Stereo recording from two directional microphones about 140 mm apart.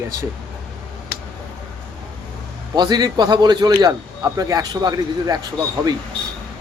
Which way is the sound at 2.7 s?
30° right (ahead or behind).